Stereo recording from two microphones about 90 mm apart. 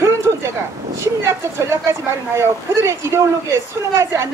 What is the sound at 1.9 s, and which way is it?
A woman's voice, 30° right (ahead or behind).